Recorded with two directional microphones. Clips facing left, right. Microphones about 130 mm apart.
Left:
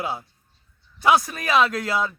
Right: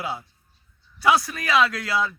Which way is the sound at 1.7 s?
45° left (ahead or behind).